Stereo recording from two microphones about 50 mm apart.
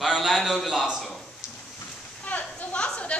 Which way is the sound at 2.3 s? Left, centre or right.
Left.